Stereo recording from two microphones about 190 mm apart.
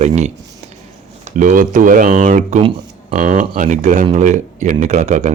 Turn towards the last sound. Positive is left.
turn(degrees=-40)  # may be behind; listen again after turning